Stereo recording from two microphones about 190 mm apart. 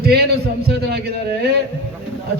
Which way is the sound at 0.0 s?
55° right (ahead or behind).